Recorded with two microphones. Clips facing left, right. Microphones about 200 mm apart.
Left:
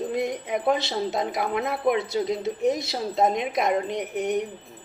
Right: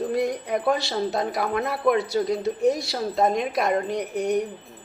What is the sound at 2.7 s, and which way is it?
A woman's voice, 20° left (ahead or behind).